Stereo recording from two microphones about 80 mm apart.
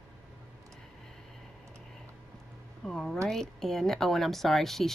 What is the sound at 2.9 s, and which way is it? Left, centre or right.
Speech, centre.